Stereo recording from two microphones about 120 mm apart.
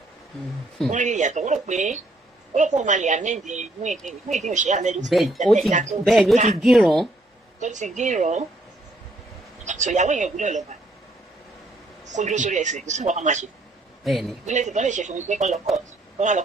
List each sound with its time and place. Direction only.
0.9 s a woman's voice: 90° right
5.0 s speech: centre (ahead or behind)
5.7 s a man's voice: 90° right
6.6 s speech: centre (ahead or behind)
7.6 s a woman's voice: 90° right
9.6 s a man's voice: 85° right
12.0 s a man's voice: 85° right
14.0 s speech: centre (ahead or behind)
14.4 s a woman's voice: 90° right